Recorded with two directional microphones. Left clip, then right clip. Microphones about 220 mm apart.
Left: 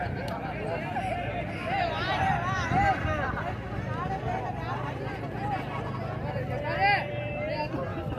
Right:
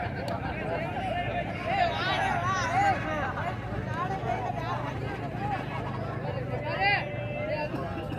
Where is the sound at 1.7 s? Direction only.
55° right (ahead or behind).